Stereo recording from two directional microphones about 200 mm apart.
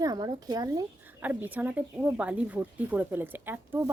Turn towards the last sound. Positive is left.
turn(degrees=-10)  # may be behind; listen again after turning